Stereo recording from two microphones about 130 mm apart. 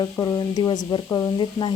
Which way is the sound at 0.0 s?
30° left (ahead or behind).